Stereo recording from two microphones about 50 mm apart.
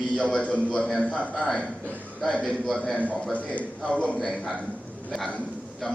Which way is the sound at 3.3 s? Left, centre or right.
Right.